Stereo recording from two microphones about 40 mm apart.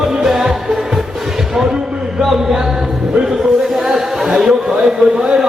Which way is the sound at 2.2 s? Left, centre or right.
Centre.